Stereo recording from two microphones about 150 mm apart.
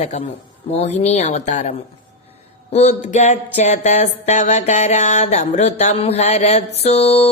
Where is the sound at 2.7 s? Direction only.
50° left (ahead or behind).